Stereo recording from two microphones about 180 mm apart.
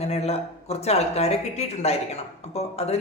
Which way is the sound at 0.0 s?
35° left (ahead or behind).